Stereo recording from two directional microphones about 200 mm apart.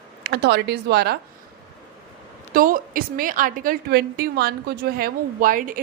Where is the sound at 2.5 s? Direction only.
45° right (ahead or behind).